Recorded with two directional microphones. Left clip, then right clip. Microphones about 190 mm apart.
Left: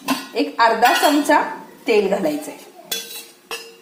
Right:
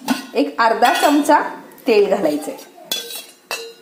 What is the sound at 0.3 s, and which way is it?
Music, 35° right (ahead or behind).